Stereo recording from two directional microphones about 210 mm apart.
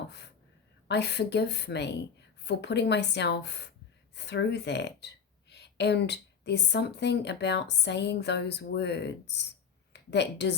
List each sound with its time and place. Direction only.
0.9 s a woman's voice: 55° left (ahead or behind)